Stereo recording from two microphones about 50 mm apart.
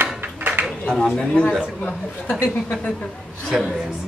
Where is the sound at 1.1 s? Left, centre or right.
Centre.